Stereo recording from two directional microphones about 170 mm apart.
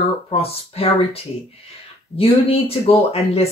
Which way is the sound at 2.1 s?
35° left (ahead or behind).